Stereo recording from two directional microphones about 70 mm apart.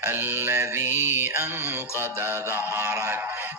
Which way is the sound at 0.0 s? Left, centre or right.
Right.